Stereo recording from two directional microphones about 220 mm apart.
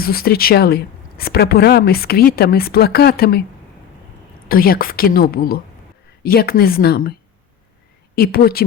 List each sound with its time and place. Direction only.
0.0 s speech: 45° left (ahead or behind)
4.4 s speech: 40° left (ahead or behind)
8.1 s speech: 45° left (ahead or behind)